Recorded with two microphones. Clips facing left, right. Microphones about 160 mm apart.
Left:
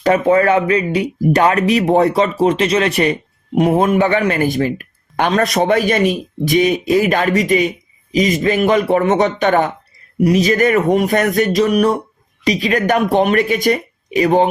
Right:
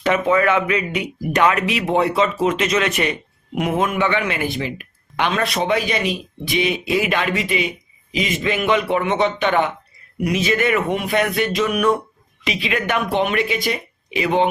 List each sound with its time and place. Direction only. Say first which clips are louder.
0.0 s speech: left 5 dB; 35° left (ahead or behind)